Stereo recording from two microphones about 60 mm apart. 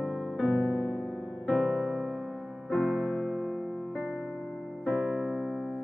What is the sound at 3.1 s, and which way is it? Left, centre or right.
Music, centre.